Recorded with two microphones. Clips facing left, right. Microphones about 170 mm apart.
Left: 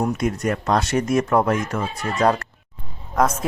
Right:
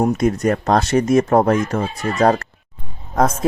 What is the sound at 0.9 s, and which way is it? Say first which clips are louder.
Speech: right 5 dB; 25° right (ahead or behind).